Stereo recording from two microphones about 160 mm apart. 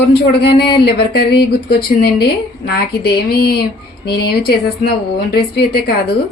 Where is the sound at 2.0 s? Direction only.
75° left (ahead or behind).